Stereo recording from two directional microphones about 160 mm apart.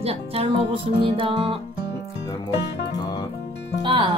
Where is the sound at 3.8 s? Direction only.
30° right (ahead or behind).